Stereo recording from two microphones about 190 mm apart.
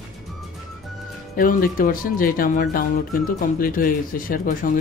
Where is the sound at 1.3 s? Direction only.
45° left (ahead or behind).